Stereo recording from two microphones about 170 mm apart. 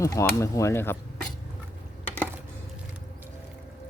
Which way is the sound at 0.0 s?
15° left (ahead or behind).